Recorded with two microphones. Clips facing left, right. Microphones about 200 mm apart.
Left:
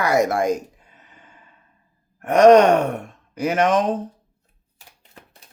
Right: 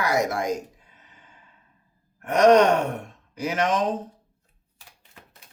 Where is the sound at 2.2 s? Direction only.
55° left (ahead or behind).